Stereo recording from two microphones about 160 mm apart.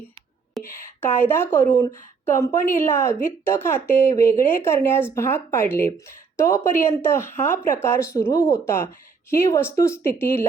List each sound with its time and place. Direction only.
0.6 s speech: 15° left (ahead or behind)